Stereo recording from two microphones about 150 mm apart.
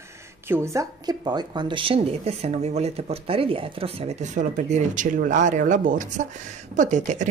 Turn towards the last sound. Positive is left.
turn(degrees=-55)  # may be behind; listen again after turning